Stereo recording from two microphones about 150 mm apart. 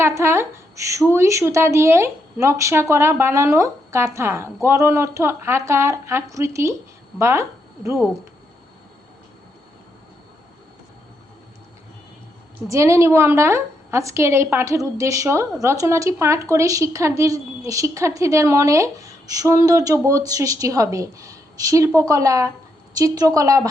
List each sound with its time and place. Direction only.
0.2 s speech: 15° right (ahead or behind)
12.6 s speech: 20° right (ahead or behind)